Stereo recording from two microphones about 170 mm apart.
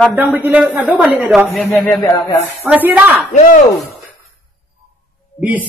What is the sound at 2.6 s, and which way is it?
Speech, 10° right (ahead or behind).